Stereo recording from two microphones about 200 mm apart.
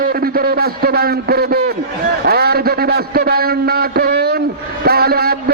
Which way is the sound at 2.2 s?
50° right (ahead or behind).